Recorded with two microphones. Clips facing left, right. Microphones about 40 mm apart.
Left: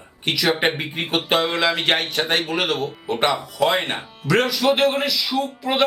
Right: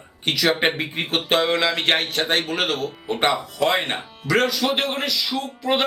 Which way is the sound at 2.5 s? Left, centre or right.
Centre.